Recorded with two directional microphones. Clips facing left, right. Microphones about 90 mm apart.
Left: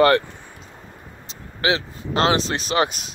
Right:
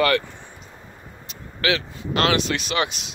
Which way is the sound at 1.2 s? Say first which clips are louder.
Left 2 dB; 25° left (ahead or behind).